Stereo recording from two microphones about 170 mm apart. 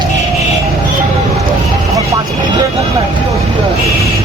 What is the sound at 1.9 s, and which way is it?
Speech, 20° right (ahead or behind).